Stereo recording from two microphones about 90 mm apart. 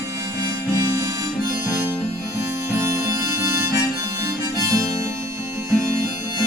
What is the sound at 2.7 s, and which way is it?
Harmonica, 35° right (ahead or behind).